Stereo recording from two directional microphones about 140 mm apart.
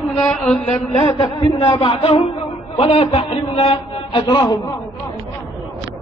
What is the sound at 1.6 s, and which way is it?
Mantra, 40° left (ahead or behind).